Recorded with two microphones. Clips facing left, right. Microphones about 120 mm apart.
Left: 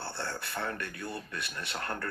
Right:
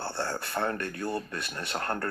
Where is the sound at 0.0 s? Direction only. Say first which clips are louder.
Right 5 dB; 40° right (ahead or behind).